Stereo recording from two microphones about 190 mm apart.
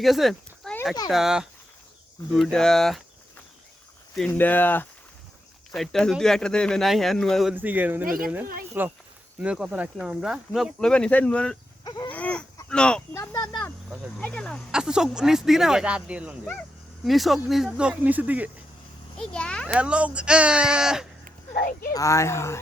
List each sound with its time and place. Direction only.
0.0 s a sound: centre (ahead or behind)
1.1 s speech: centre (ahead or behind)
4.2 s speech: 10° left (ahead or behind)
7.5 s speech: 10° right (ahead or behind)
11.9 s livestock: 20° left (ahead or behind)
12.1 s a sound: 5° left (ahead or behind)
12.6 s speech: 5° left (ahead or behind)
13.3 s insect: 20° left (ahead or behind)
14.2 s speech: 5° left (ahead or behind)
19.1 s speech: 5° left (ahead or behind)
19.6 s speech: 5° right (ahead or behind)
21.6 s speech: 50° left (ahead or behind)
21.9 s speech: 15° left (ahead or behind)